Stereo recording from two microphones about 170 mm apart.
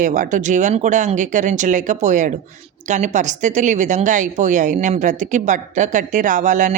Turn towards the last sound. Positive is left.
turn(degrees=-50)  # may be behind; listen again after turning